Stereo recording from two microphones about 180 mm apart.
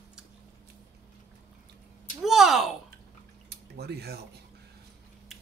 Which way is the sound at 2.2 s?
Centre (ahead or behind).